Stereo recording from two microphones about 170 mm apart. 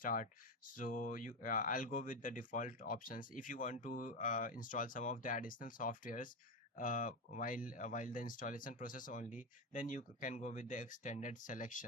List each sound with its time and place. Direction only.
0.0 s speech: 50° left (ahead or behind)